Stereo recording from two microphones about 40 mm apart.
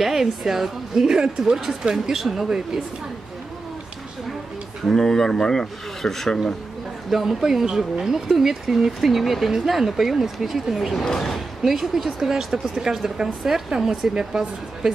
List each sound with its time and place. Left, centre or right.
0.0 s speech: centre
4.8 s speech: centre
7.1 s speech: centre
11.6 s speech: centre
14.1 s speech: centre